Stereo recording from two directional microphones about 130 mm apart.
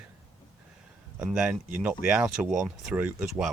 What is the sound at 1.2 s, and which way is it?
Speech, 10° right (ahead or behind).